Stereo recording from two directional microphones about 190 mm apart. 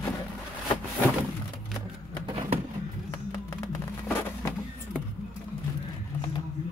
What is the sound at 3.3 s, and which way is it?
Music, 20° left (ahead or behind).